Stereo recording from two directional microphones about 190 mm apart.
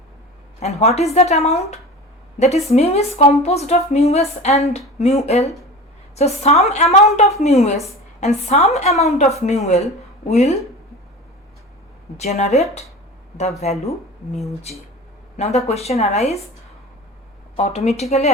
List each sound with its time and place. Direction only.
0.6 s speech: 35° left (ahead or behind)
12.1 s speech: 35° left (ahead or behind)
15.4 s speech: 35° left (ahead or behind)
17.6 s speech: 35° left (ahead or behind)